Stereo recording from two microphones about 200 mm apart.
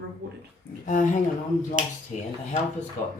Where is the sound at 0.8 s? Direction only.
40° left (ahead or behind).